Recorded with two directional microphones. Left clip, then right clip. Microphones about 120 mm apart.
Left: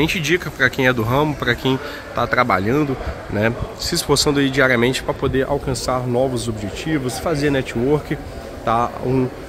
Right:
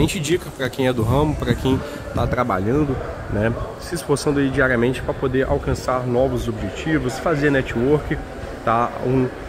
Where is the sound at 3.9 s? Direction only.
35° left (ahead or behind).